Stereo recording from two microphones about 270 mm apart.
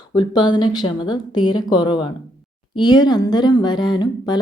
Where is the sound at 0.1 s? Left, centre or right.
Centre.